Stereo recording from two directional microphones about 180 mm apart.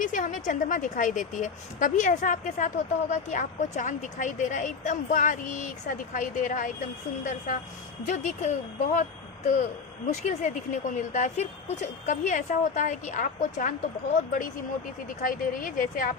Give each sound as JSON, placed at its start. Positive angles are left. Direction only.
{"t": 0.0, "sound": "a woman's voice", "side_deg": 45}
{"t": 10.1, "sound": "a woman's voice", "side_deg": 40}
{"t": 15.2, "sound": "a woman's voice", "side_deg": 50}